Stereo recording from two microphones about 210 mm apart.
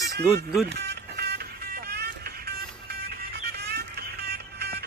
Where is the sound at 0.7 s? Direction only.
55° right (ahead or behind).